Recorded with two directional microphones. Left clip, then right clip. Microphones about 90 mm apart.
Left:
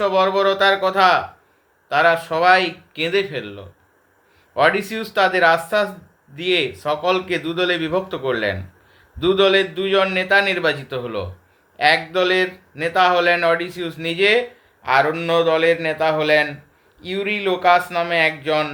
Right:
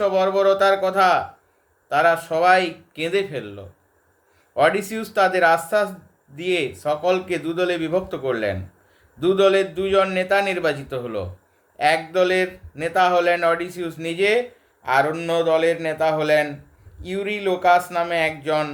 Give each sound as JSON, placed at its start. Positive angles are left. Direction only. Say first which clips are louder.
{"t": 0.0, "sound": "speech", "louder": "left 1 dB", "side_deg": -25}